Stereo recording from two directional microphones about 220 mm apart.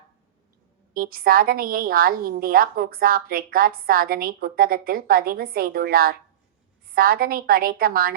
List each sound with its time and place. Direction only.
0.9 s a woman's voice: 40° right (ahead or behind)